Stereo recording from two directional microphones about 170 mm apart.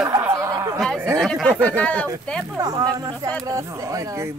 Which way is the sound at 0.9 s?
15° right (ahead or behind).